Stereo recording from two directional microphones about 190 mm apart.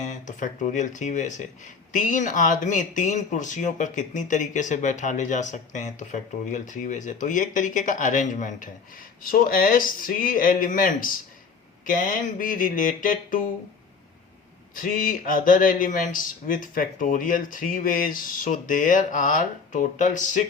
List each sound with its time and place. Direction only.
0.0 s speech: 40° left (ahead or behind)
14.8 s speech: 45° left (ahead or behind)